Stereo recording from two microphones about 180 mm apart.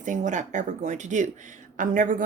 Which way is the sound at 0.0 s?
45° right (ahead or behind).